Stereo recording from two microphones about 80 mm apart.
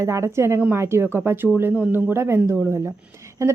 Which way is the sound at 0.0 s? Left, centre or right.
Right.